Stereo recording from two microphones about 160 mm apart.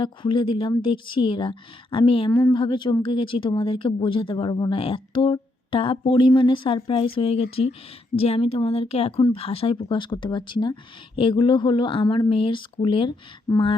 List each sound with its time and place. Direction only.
0.0 s speech: 30° left (ahead or behind)